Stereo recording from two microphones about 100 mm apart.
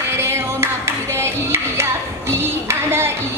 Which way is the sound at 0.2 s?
25° right (ahead or behind).